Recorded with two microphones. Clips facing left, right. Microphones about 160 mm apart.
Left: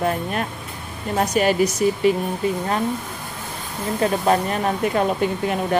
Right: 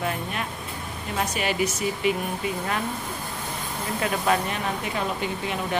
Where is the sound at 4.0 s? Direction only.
40° left (ahead or behind).